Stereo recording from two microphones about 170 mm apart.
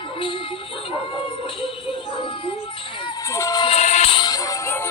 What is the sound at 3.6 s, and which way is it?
Music, 40° left (ahead or behind).